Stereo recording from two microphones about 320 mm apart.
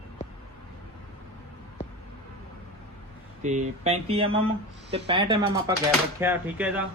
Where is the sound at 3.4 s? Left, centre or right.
Right.